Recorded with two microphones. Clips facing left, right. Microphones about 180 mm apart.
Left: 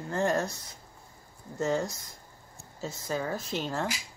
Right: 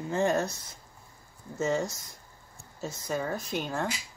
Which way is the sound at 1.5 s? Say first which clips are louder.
Even; centre (ahead or behind).